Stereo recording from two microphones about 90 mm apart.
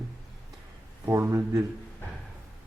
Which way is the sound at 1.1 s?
30° right (ahead or behind).